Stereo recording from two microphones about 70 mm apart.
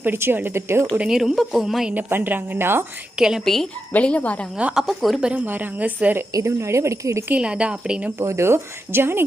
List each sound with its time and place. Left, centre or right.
0.0 s speech: right
0.9 s speech: centre
1.9 s a woman's voice: right
3.2 s a woman's voice: centre
3.4 s speech: centre
3.9 s speech: left
4.5 s a woman's voice: centre
4.8 s speech: centre
5.5 s a woman's voice: right
6.3 s speech: right
7.3 s a woman's voice: centre
8.2 s speech: right